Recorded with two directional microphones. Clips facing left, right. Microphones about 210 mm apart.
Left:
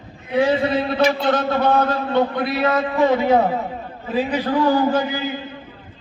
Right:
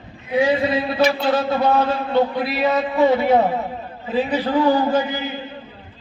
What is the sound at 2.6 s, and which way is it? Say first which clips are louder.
Speech: right 1 dB; 20° right (ahead or behind).